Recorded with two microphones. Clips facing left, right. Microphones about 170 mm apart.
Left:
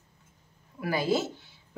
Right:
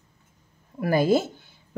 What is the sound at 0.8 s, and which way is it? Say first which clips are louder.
Speech: right 6 dB; 50° right (ahead or behind).